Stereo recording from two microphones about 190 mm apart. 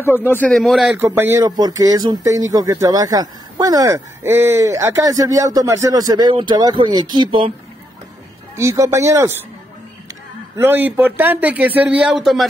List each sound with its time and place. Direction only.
0.0 s a man's voice: 10° left (ahead or behind)
0.9 s speech: 10° right (ahead or behind); by 7.5 s 30° right (ahead or behind)
8.5 s speech: 15° right (ahead or behind)
10.5 s speech: 10° right (ahead or behind)